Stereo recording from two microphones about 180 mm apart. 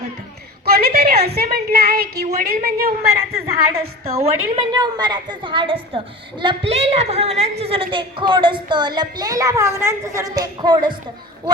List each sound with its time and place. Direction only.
0.6 s a woman's voice: 60° right (ahead or behind)
4.0 s a woman's voice: 35° right (ahead or behind)